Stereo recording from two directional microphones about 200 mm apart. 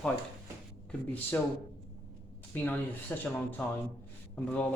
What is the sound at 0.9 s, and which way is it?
Speech, 10° left (ahead or behind).